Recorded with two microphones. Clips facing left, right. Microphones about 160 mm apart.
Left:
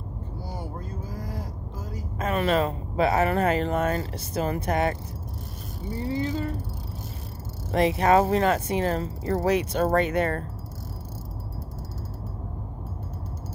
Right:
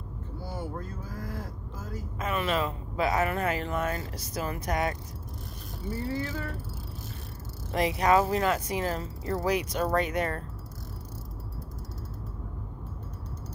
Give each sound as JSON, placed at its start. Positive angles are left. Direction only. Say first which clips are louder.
{"t": 0.5, "sound": "cattle", "louder": "right 1 dB", "side_deg": 15}
{"t": 2.1, "sound": "speech", "louder": "left 5 dB", "side_deg": 35}
{"t": 5.9, "sound": "speech", "louder": "left 6 dB", "side_deg": 20}
{"t": 7.7, "sound": "speech", "louder": "left 4 dB", "side_deg": 30}